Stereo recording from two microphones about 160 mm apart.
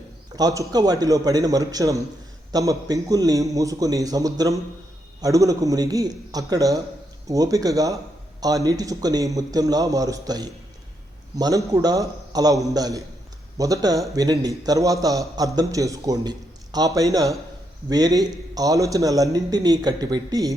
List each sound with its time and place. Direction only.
0.3 s a man's voice: 20° right (ahead or behind)